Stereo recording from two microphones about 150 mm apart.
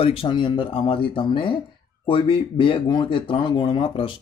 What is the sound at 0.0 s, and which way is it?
Speech, 40° left (ahead or behind).